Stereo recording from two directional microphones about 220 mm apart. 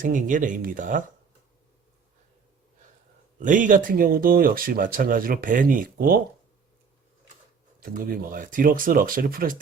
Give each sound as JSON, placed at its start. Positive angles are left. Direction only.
{"t": 0.0, "sound": "speech", "side_deg": -35}
{"t": 3.4, "sound": "speech", "side_deg": -35}
{"t": 7.8, "sound": "speech", "side_deg": -40}